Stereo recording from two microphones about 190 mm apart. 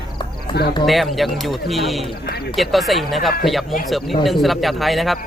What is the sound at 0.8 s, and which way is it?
Speech, centre (ahead or behind).